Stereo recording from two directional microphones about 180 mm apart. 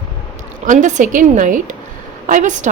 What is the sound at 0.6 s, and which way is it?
A woman's voice, 45° right (ahead or behind).